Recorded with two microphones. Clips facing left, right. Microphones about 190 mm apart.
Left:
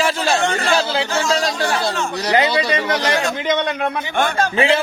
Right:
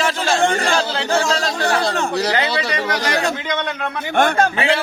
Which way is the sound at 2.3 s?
20° left (ahead or behind).